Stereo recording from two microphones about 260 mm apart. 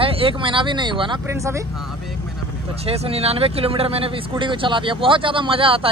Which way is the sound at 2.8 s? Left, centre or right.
Right.